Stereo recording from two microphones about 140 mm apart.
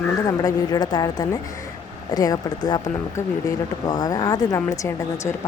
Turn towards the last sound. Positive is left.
turn(degrees=25)  # may be behind; listen again after turning